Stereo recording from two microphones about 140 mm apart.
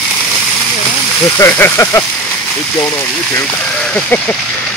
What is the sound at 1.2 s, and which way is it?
Speech, 20° left (ahead or behind).